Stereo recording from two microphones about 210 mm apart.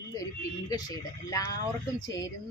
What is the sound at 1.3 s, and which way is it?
A woman's voice, 15° left (ahead or behind).